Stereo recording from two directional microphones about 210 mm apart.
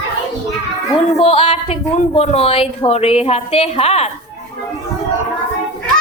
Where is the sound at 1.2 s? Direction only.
30° left (ahead or behind).